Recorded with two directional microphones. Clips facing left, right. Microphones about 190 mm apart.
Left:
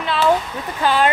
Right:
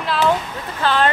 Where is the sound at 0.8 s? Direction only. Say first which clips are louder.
Left 1 dB; 10° left (ahead or behind).